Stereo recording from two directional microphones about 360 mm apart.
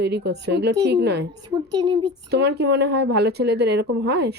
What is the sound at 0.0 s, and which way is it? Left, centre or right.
A woman's voice, right.